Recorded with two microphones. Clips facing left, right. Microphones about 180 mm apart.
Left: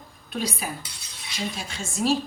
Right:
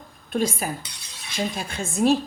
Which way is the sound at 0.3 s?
50° right (ahead or behind).